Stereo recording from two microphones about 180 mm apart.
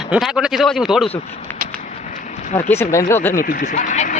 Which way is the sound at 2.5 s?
15° left (ahead or behind).